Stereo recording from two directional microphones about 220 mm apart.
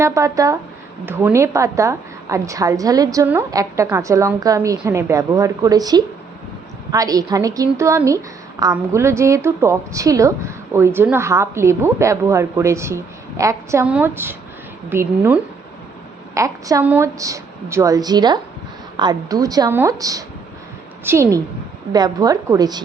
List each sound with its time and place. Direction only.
0.0 s a woman's voice: 15° right (ahead or behind)